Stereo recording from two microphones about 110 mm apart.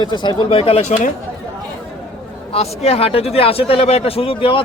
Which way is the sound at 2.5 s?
70° left (ahead or behind).